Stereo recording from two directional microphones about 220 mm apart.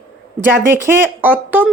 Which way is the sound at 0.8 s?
10° right (ahead or behind).